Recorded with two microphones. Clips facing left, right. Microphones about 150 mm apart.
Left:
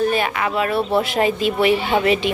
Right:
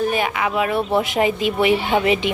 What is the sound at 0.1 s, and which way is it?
A woman's voice, 15° right (ahead or behind).